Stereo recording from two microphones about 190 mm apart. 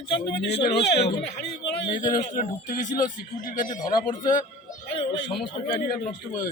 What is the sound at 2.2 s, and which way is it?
Speech, 45° left (ahead or behind).